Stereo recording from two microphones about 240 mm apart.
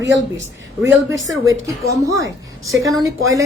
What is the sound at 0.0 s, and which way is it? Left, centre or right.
Speech, right.